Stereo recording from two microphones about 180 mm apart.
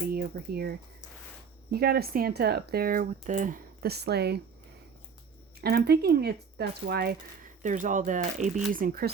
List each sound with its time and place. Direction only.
0.1 s speech: 60° right (ahead or behind)
5.5 s speech: 60° right (ahead or behind)